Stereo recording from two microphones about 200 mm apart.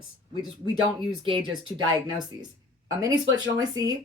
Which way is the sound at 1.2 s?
25° right (ahead or behind).